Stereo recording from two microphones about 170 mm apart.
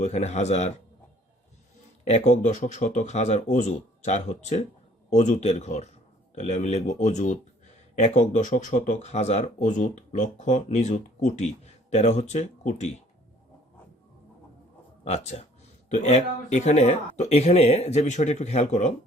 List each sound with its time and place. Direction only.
0.0 s speech: 40° left (ahead or behind)
2.0 s speech: 40° left (ahead or behind)
15.0 s speech: 40° left (ahead or behind)